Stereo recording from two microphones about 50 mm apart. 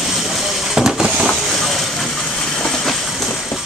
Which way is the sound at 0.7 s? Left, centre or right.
Centre.